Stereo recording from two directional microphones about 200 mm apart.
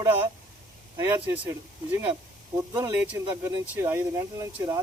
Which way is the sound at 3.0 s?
10° right (ahead or behind).